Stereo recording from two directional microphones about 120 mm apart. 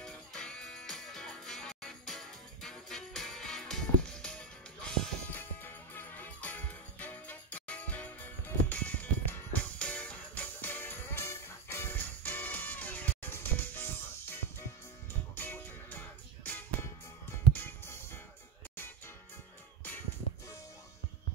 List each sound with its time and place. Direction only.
0.0 s music: 5° left (ahead or behind)
5.3 s music: 15° left (ahead or behind)